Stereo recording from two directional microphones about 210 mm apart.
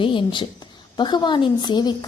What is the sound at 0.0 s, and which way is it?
A woman's voice, 25° left (ahead or behind).